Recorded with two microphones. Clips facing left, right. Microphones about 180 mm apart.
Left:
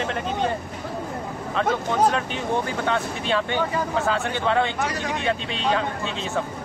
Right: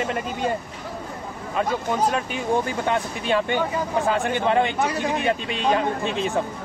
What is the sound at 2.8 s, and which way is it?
Speech, 15° right (ahead or behind).